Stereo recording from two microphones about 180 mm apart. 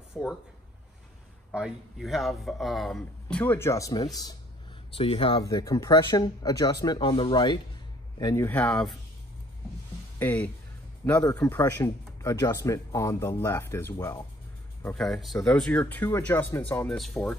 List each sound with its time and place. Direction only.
0.1 s speech: centre (ahead or behind)
1.5 s speech: centre (ahead or behind); by 4.4 s 20° left (ahead or behind)
4.9 s speech: 30° left (ahead or behind)
5.4 s a man's voice: 20° left (ahead or behind); by 8.9 s 5° left (ahead or behind)
10.1 s a man's voice: 10° left (ahead or behind)
15.0 s a man's voice: centre (ahead or behind)